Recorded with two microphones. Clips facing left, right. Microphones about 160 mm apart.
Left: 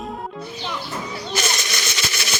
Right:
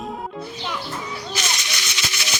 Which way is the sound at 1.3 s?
50° left (ahead or behind).